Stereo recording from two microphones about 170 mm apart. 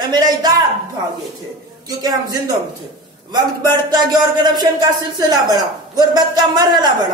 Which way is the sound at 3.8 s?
25° right (ahead or behind).